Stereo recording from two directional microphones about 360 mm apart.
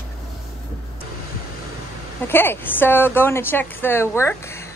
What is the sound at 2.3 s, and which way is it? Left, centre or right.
A woman's voice, centre.